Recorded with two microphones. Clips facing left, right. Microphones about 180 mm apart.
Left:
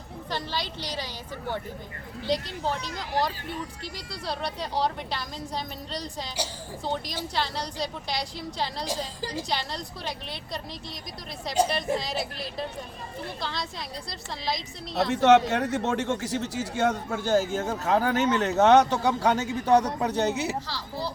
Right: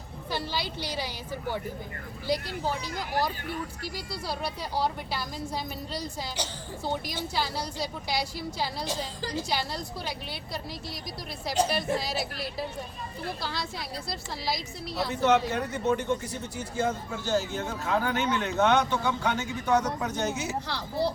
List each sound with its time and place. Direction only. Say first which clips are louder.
0.3 s a woman's voice: even; 10° right (ahead or behind)
3.8 s a woman's voice: even; 5° right (ahead or behind)
8.9 s a woman's voice: left 1 dB; 10° left (ahead or behind)
9.4 s a woman's voice: even; 5° right (ahead or behind)
11.7 s a woman's voice: left 1 dB; 5° right (ahead or behind)
15.1 s speech: left 5 dB; 75° left (ahead or behind); by 20.6 s 35° left (ahead or behind)
20.7 s a woman's voice: right 4 dB; 60° right (ahead or behind)